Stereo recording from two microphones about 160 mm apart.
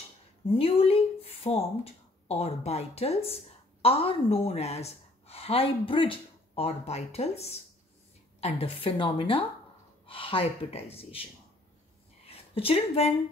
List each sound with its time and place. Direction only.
0.5 s a woman's voice: 35° left (ahead or behind)
12.3 s speech: 40° left (ahead or behind)